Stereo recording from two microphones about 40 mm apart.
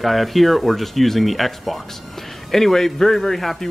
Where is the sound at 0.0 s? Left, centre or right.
Centre.